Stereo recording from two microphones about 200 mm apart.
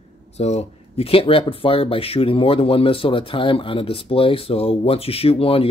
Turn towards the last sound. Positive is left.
turn(degrees=30)  # may be behind; listen again after turning